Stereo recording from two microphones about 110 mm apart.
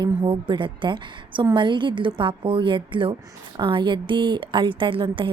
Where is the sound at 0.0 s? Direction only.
50° right (ahead or behind).